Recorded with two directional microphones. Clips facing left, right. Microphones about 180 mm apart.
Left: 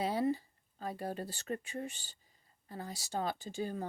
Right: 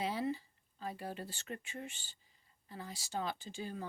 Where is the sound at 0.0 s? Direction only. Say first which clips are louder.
Left 4 dB; 40° left (ahead or behind).